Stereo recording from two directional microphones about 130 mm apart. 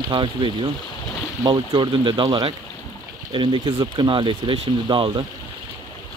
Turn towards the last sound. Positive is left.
turn(degrees=-40)  # may be behind; listen again after turning